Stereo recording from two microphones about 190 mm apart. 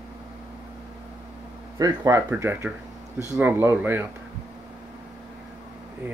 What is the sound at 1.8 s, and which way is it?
Speech, 20° right (ahead or behind).